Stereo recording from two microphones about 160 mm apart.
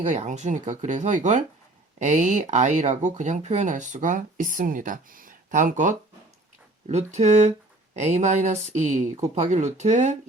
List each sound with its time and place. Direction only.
0.0 s speech: 50° right (ahead or behind)